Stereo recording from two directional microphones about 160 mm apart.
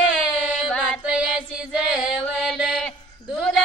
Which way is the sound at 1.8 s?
5° right (ahead or behind).